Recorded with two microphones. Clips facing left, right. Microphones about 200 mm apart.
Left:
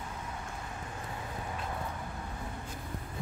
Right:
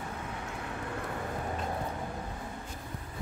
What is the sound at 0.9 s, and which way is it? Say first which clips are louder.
Vehicle: right 5 dB; 60° right (ahead or behind).